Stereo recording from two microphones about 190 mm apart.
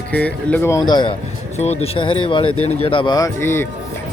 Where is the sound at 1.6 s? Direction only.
35° left (ahead or behind); by 3.6 s 15° left (ahead or behind).